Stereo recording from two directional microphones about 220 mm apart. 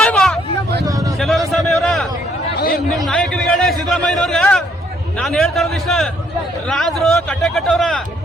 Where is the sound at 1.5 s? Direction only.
Centre (ahead or behind).